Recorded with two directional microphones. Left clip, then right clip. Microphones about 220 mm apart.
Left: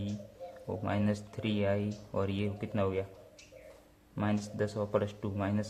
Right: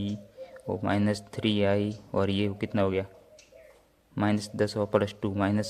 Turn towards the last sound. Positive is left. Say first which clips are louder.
# right 7 dB
turn(degrees=-40)  # may be behind; listen again after turning